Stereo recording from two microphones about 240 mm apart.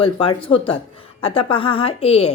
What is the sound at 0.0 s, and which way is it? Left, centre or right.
A woman's voice, left.